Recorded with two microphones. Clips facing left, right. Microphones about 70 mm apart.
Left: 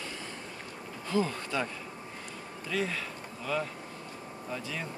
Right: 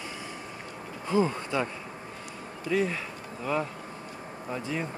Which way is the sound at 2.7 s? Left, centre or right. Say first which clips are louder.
Right 5 dB; centre.